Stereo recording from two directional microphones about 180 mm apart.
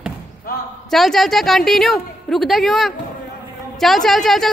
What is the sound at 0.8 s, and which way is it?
A woman's voice, centre (ahead or behind).